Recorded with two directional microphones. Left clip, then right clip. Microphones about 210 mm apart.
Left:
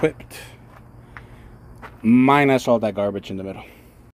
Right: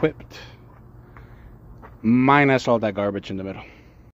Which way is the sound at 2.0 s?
15° left (ahead or behind).